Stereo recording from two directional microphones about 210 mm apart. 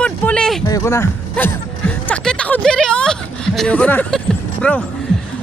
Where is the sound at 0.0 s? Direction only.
5° left (ahead or behind).